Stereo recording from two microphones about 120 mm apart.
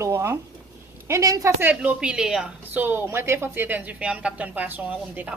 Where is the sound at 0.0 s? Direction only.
20° right (ahead or behind).